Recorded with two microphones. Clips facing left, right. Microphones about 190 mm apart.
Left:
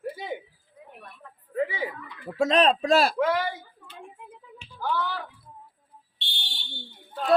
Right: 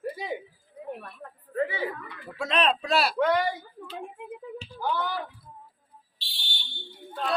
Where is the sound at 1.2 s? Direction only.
65° right (ahead or behind).